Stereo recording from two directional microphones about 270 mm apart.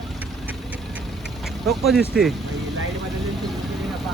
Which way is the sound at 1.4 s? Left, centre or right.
Centre.